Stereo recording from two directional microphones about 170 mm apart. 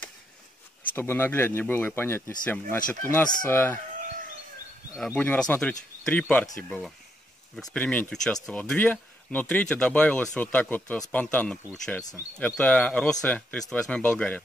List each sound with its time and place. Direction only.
0.9 s speech: 10° left (ahead or behind)
4.9 s speech: 5° left (ahead or behind)
7.5 s speech: 5° left (ahead or behind)
12.0 s speech: 20° left (ahead or behind)
12.4 s speech: 5° left (ahead or behind)